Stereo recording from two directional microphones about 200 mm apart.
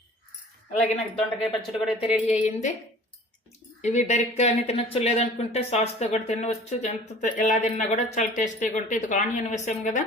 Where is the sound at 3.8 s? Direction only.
35° left (ahead or behind).